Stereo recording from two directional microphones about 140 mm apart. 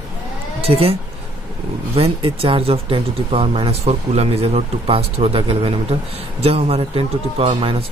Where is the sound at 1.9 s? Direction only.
40° right (ahead or behind).